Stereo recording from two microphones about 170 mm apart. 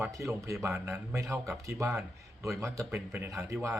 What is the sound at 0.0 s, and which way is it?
A man's voice, 15° right (ahead or behind).